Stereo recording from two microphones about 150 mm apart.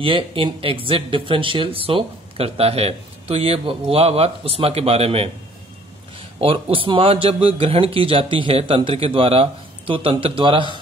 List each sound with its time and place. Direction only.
0.0 s speech: 35° right (ahead or behind)
6.4 s speech: 35° right (ahead or behind)